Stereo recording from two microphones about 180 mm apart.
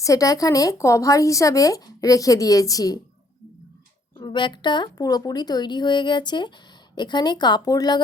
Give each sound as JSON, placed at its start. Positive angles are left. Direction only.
{"t": 0.0, "sound": "speech", "side_deg": 20}
{"t": 4.2, "sound": "speech", "side_deg": 25}